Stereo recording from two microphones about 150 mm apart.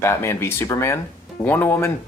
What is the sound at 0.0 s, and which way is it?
Speech, 15° left (ahead or behind).